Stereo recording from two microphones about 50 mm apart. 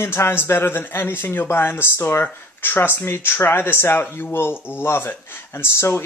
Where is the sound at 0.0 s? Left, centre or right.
Left.